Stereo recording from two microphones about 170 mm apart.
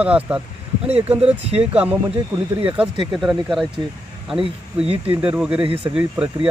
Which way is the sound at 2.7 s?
5° right (ahead or behind).